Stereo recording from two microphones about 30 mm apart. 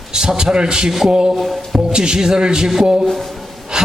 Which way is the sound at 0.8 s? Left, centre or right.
Centre.